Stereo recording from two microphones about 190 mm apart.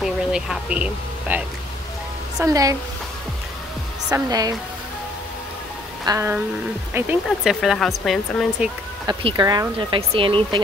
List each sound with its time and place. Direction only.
0.0 s speech: 5° right (ahead or behind)
2.3 s speech: 20° right (ahead or behind)
4.1 s speech: 20° right (ahead or behind)
6.0 s speech: 15° right (ahead or behind)
9.0 s speech: 20° right (ahead or behind)